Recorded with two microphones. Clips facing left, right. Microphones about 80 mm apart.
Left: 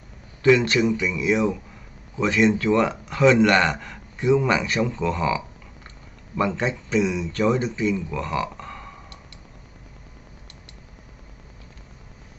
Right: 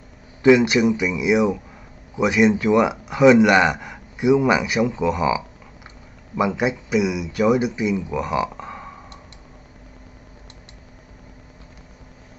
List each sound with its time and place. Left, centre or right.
0.4 s a man's voice: centre